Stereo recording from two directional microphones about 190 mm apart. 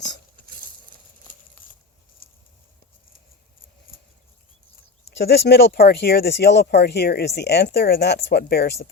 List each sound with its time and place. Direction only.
5.1 s speech: 60° left (ahead or behind)